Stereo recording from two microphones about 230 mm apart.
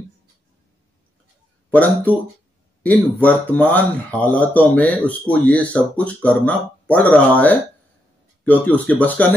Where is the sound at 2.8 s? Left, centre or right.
Centre.